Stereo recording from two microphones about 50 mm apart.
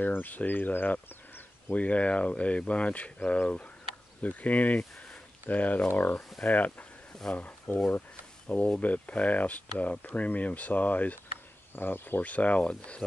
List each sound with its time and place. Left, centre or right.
0.0 s speech: left
11.7 s speech: left
12.2 s speech: left